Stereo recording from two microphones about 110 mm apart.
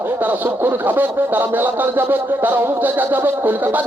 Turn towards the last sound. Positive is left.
turn(degrees=-15)  # may be behind; listen again after turning